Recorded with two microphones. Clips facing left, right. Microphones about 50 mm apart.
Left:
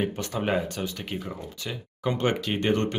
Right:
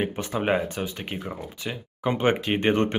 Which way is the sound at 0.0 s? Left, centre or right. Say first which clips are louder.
Right 2 dB; right.